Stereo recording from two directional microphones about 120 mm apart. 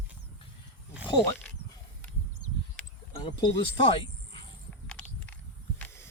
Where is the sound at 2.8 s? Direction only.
5° left (ahead or behind).